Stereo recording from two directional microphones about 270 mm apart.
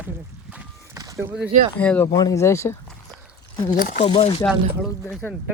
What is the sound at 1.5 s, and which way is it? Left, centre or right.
Speech, right.